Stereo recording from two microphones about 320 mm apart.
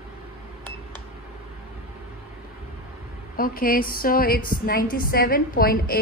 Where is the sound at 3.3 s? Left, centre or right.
Left.